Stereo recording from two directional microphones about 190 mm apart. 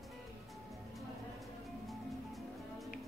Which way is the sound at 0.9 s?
Centre (ahead or behind).